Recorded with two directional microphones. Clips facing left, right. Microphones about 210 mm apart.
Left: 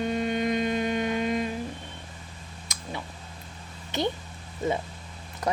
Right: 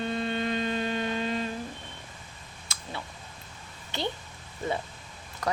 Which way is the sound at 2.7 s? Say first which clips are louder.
Even; 15° left (ahead or behind).